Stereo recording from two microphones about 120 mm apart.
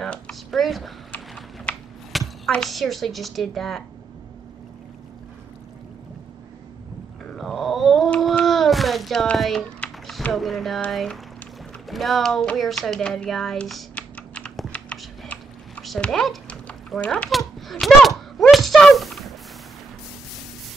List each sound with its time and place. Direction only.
0.0 s speech: 5° left (ahead or behind)
1.1 s typing: 10° left (ahead or behind)
2.1 s a woman's voice: 5° left (ahead or behind)
7.3 s a sound: centre (ahead or behind)
10.9 s speech: centre (ahead or behind)
11.9 s a sound: centre (ahead or behind)